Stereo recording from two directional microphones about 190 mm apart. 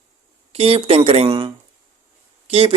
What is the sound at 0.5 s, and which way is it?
Speech, 30° right (ahead or behind).